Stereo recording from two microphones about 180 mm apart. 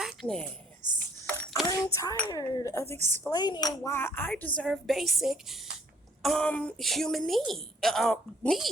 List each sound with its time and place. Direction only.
0.0 s a sound: centre (ahead or behind)
0.8 s cutlery: 45° right (ahead or behind)
1.6 s a woman's voice: 20° left (ahead or behind); by 8.7 s centre (ahead or behind)